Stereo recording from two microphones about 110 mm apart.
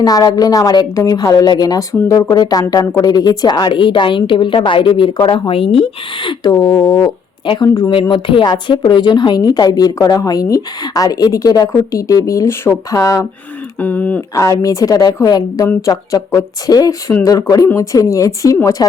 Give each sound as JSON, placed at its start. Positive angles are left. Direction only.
{"t": 0.0, "sound": "a woman's voice", "side_deg": 35}
{"t": 6.5, "sound": "a woman's voice", "side_deg": 35}
{"t": 8.1, "sound": "a woman's voice", "side_deg": 50}
{"t": 13.7, "sound": "speech", "side_deg": 15}
{"t": 14.3, "sound": "a woman's voice", "side_deg": 30}